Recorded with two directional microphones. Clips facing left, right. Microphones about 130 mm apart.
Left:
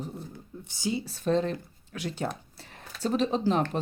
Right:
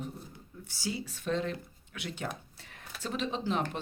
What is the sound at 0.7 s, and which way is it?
Speech, 20° left (ahead or behind).